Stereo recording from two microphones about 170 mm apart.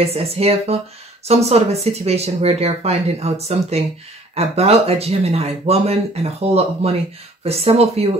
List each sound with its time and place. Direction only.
0.0 s speech: 35° right (ahead or behind)